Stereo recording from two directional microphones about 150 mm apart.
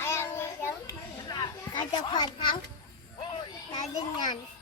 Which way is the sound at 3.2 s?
35° left (ahead or behind).